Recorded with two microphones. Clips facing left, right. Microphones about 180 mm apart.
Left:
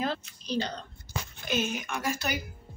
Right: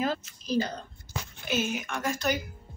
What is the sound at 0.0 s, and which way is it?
A woman's voice, 5° right (ahead or behind).